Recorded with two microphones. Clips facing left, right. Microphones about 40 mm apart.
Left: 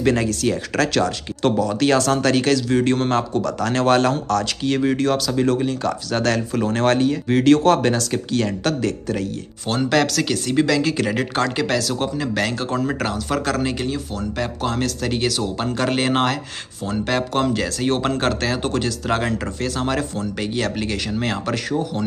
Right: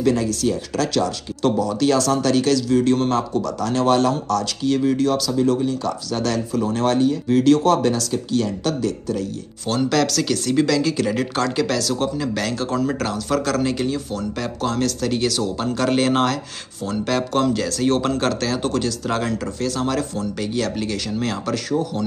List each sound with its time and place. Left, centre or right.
0.0 s speech: left
1.0 s speech: left
3.7 s speech: left
4.1 s speech: left
7.3 s speech: left
9.7 s speech: left